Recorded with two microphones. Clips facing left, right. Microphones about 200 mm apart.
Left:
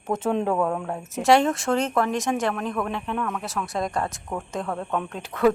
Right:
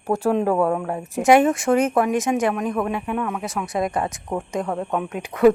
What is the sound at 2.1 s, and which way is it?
A woman's voice, centre (ahead or behind).